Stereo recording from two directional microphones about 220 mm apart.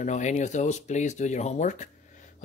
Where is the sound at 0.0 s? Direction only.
30° left (ahead or behind).